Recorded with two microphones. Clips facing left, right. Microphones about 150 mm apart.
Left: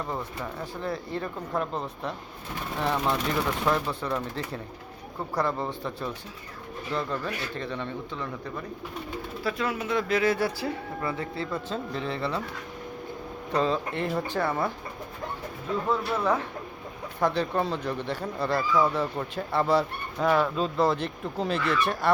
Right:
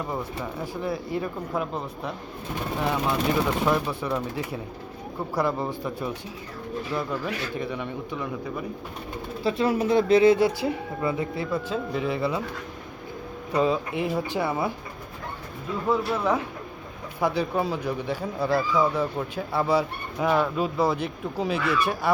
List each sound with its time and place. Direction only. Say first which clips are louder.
0.6 s speech: right 3 dB; 10° right (ahead or behind)
9.4 s speech: right 7 dB; 30° right (ahead or behind); by 12.4 s 10° right (ahead or behind)
13.5 s speech: right 3 dB; 10° right (ahead or behind)
15.9 s speech: right 3 dB; 10° right (ahead or behind)